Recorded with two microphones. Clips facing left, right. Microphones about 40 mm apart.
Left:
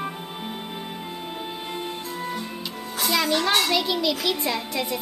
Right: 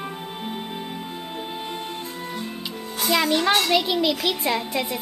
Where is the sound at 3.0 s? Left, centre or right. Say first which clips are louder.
Right 2 dB; centre.